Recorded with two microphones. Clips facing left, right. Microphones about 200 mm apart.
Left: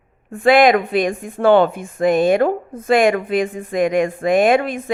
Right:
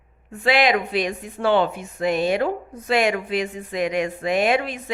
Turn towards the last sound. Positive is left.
turn(degrees=50)  # may be behind; listen again after turning